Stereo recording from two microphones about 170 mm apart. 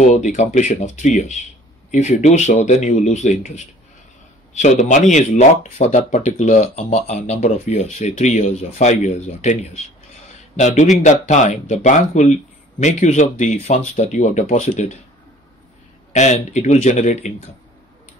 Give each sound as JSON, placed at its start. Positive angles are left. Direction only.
{"t": 0.0, "sound": "speech", "side_deg": 45}
{"t": 16.1, "sound": "speech", "side_deg": 45}